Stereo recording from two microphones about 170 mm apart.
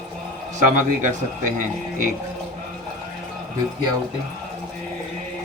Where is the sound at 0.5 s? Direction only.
45° right (ahead or behind).